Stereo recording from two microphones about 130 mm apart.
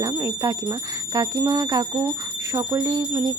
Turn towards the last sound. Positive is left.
turn(degrees=-30)  # may be behind; listen again after turning